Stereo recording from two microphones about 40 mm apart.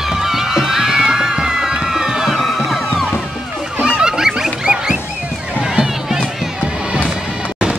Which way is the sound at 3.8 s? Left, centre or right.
Centre.